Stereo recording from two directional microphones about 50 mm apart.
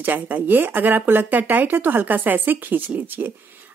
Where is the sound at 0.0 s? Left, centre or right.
Right.